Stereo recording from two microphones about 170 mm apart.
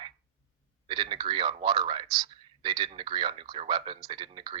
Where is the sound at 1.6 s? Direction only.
25° right (ahead or behind).